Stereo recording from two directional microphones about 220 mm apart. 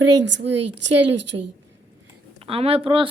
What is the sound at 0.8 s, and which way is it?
Speech, 90° right.